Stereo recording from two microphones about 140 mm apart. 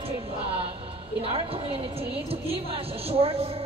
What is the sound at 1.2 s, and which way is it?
A woman's voice, 40° right (ahead or behind).